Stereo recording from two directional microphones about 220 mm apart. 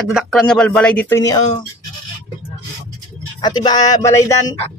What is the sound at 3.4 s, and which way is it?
A man's voice, 20° left (ahead or behind).